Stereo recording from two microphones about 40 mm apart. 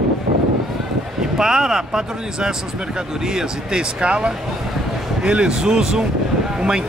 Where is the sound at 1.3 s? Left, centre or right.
Centre.